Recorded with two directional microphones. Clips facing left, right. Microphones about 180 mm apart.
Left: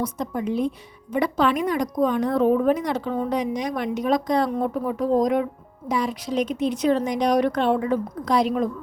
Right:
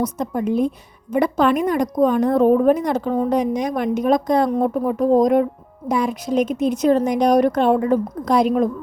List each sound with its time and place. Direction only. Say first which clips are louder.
0.0 s a woman's voice: right 4 dB; 50° right (ahead or behind)